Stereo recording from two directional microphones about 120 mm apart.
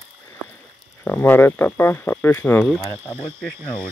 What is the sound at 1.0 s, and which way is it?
Speech, 15° left (ahead or behind).